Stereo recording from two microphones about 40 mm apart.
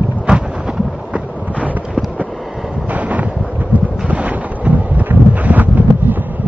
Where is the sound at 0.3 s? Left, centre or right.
Right.